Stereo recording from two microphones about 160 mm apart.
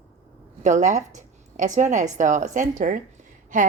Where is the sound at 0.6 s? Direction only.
50° right (ahead or behind).